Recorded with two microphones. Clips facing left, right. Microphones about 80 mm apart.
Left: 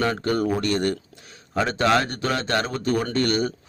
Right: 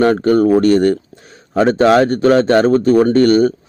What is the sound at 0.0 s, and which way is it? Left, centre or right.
A man's voice, right.